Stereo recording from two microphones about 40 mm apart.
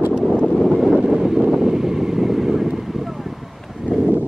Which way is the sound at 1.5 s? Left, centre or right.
Centre.